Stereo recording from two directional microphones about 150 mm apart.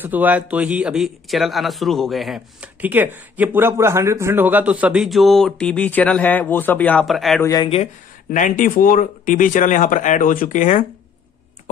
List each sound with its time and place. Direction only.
0.0 s a man's voice: 10° right (ahead or behind); by 7.1 s 10° left (ahead or behind)
7.1 s a man's voice: centre (ahead or behind)
7.4 s speech: 25° left (ahead or behind)
8.3 s speech: 65° left (ahead or behind)